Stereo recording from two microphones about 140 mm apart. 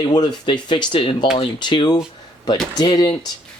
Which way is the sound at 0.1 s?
30° left (ahead or behind).